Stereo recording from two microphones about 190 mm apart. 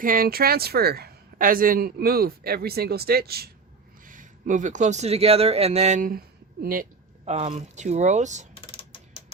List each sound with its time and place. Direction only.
0.0 s speech: 50° right (ahead or behind)
4.0 s speech: 45° right (ahead or behind)
7.3 s speech: 35° right (ahead or behind)